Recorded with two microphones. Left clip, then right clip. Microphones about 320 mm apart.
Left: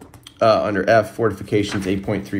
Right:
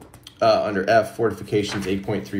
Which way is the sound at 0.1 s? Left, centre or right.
Centre.